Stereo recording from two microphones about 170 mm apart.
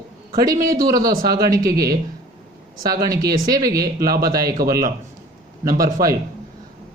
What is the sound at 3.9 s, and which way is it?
Speech, 60° right (ahead or behind).